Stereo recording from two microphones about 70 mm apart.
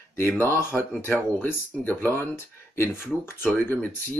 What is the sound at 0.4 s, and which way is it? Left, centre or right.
Speech, left.